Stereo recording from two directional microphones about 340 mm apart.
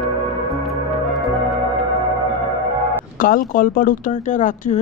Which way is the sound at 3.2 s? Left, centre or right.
Left.